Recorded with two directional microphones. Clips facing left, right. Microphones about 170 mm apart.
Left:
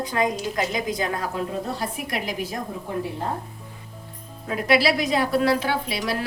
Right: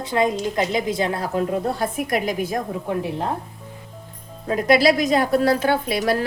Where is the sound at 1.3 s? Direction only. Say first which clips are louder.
Right 6 dB; 50° right (ahead or behind).